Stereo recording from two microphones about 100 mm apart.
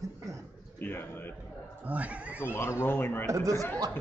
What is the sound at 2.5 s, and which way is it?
Speech, 25° left (ahead or behind).